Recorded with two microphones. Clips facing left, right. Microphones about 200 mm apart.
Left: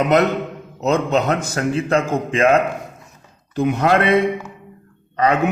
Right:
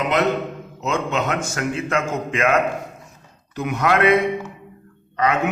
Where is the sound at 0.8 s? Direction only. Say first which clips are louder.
Left 5 dB; 35° left (ahead or behind).